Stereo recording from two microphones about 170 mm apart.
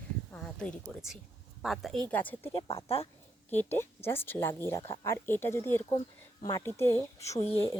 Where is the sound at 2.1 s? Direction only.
10° left (ahead or behind).